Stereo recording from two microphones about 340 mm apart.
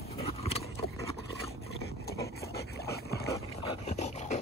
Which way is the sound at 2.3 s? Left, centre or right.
Left.